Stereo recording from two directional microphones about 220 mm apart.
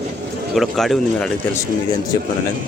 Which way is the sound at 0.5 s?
Centre (ahead or behind).